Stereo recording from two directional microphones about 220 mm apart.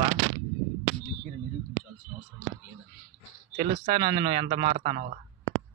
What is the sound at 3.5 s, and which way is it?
Speech, 25° right (ahead or behind).